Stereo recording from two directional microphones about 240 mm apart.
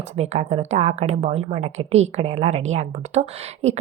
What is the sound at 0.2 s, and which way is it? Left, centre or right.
A woman's voice, right.